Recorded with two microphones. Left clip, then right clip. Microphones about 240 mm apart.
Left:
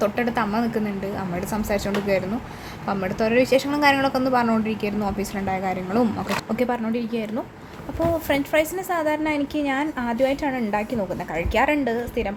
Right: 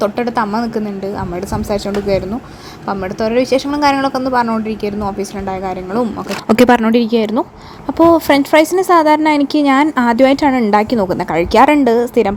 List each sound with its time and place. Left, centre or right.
0.0 s a woman's voice: centre
6.5 s a woman's voice: right